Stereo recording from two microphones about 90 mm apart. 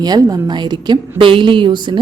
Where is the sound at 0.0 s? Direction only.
50° right (ahead or behind).